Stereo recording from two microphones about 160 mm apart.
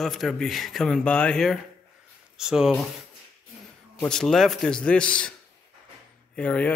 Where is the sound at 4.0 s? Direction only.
5° left (ahead or behind).